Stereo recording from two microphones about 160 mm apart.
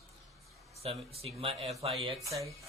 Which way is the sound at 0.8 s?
40° right (ahead or behind).